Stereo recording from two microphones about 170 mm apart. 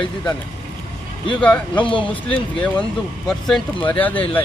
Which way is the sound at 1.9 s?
30° left (ahead or behind).